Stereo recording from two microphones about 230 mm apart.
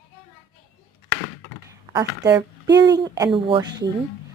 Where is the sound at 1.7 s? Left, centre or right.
Centre.